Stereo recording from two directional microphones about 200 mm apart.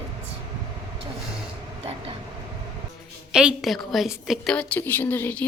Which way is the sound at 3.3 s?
5° right (ahead or behind).